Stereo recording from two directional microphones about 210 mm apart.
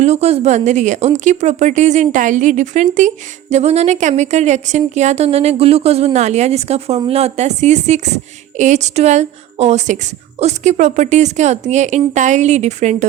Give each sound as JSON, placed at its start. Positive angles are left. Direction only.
{"t": 0.0, "sound": "a woman's voice", "side_deg": -30}